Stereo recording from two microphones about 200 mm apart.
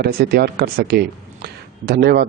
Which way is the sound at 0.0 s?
50° right (ahead or behind).